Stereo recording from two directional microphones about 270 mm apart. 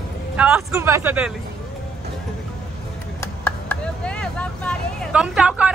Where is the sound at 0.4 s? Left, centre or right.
Centre.